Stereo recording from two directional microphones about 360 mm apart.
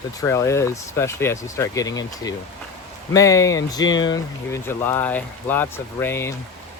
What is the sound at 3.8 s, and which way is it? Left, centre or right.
Speech, left.